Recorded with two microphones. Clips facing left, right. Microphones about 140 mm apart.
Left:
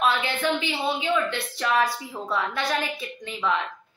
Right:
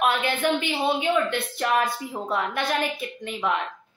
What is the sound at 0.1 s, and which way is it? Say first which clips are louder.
Speech: right 2 dB; 50° right (ahead or behind).